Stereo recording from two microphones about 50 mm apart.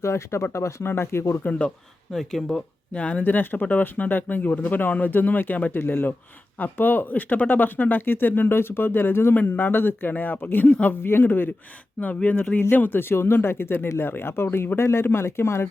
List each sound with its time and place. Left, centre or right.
0.0 s speech: left
0.9 s speech: left
1.5 s speech: left
2.1 s speech: centre
2.9 s speech: left
11.0 s speech: left
11.9 s speech: left
12.7 s speech: left